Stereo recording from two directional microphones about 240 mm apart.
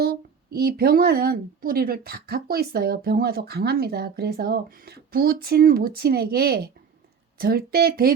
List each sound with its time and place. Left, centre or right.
0.0 s speech: right